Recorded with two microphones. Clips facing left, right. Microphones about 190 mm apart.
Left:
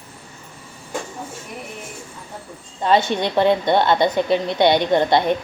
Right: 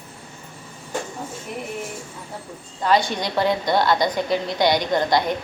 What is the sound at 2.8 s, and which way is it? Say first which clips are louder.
A woman's voice: left 3 dB; 25° left (ahead or behind).